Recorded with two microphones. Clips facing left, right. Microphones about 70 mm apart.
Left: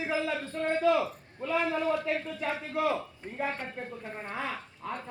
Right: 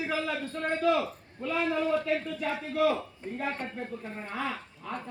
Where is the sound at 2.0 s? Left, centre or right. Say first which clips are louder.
Right 2 dB; left.